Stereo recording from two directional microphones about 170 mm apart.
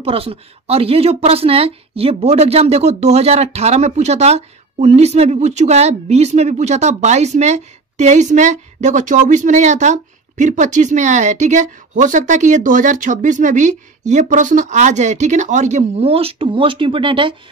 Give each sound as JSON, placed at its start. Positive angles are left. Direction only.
{"t": 0.0, "sound": "a woman's voice", "side_deg": -35}